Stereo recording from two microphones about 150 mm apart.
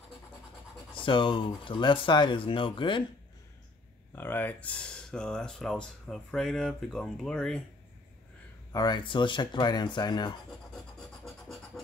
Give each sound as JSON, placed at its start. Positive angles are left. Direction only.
{"t": 0.9, "sound": "speech", "side_deg": 35}
{"t": 4.1, "sound": "speech", "side_deg": 15}
{"t": 8.7, "sound": "speech", "side_deg": 30}
{"t": 11.2, "sound": "scratch", "side_deg": 0}